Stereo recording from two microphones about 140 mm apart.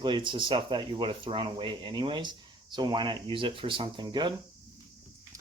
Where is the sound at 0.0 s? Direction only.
35° right (ahead or behind).